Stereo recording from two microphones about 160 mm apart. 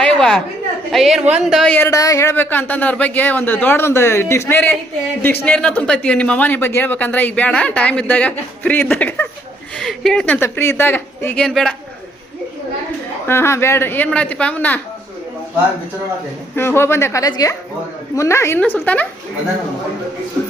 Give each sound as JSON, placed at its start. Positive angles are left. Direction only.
{"t": 0.0, "sound": "a sound", "side_deg": 5}
{"t": 0.9, "sound": "a man's voice", "side_deg": 0}
{"t": 10.4, "sound": "a man's voice", "side_deg": 15}
{"t": 13.2, "sound": "a man's voice", "side_deg": 15}
{"t": 16.6, "sound": "a man's voice", "side_deg": 15}